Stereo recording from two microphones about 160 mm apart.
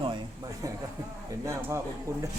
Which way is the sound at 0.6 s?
20° right (ahead or behind).